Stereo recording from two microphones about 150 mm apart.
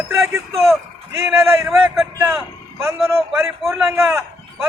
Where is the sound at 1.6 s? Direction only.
Centre (ahead or behind).